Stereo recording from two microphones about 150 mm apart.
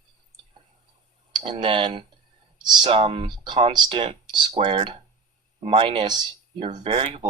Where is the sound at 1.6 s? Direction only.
30° right (ahead or behind).